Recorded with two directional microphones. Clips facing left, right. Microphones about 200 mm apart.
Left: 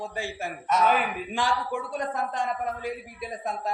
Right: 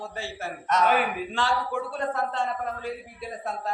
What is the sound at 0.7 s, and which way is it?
Speech, 5° left (ahead or behind).